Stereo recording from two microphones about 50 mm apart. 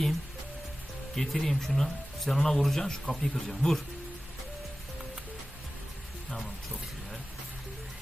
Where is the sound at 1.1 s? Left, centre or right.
Centre.